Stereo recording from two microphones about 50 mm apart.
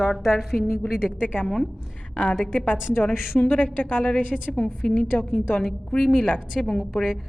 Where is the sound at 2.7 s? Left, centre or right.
Left.